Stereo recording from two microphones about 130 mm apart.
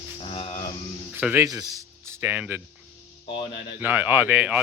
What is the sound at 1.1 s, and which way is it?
Speech, 15° right (ahead or behind).